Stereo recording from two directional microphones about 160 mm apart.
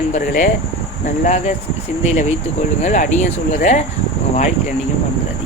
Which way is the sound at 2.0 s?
45° left (ahead or behind).